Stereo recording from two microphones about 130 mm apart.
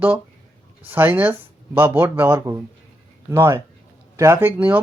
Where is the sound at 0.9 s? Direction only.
15° right (ahead or behind).